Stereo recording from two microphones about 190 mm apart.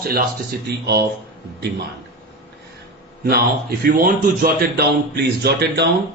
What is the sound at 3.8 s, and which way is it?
A man's voice, 50° right (ahead or behind).